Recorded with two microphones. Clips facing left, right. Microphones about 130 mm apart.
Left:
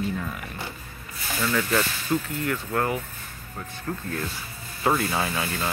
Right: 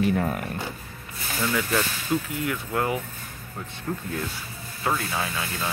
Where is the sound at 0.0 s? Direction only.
55° right (ahead or behind).